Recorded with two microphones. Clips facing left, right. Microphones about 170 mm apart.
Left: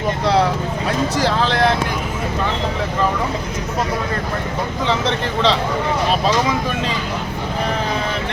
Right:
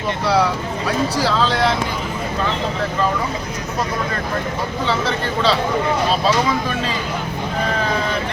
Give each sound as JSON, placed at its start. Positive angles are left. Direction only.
{"t": 4.9, "sound": "speech", "side_deg": 20}